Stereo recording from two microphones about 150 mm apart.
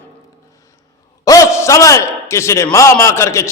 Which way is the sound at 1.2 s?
20° left (ahead or behind).